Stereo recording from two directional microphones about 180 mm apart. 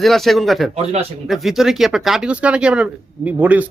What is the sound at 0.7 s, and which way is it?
Speech, 35° right (ahead or behind).